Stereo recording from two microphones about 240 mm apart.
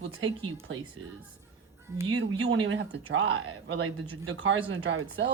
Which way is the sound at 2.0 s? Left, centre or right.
Right.